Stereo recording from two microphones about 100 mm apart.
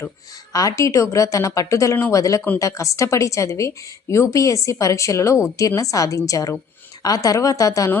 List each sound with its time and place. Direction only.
0.5 s speech: 35° left (ahead or behind)